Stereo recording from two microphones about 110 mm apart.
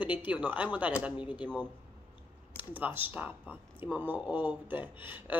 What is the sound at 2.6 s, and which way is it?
A woman's voice, 15° right (ahead or behind).